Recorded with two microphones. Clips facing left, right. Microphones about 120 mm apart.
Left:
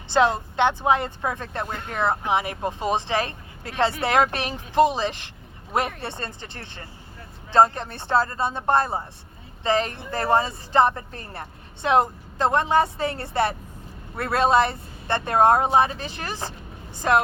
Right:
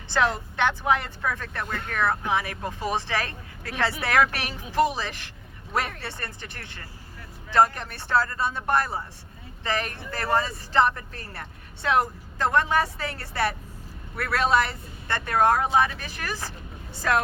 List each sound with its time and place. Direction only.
0.1 s speech: 20° left (ahead or behind)